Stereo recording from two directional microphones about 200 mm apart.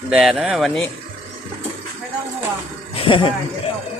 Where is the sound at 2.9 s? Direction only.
25° left (ahead or behind).